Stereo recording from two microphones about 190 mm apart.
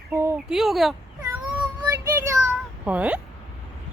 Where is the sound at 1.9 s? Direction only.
15° right (ahead or behind).